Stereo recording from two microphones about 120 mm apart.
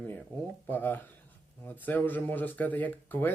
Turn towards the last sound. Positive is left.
turn(degrees=15)  # may be behind; listen again after turning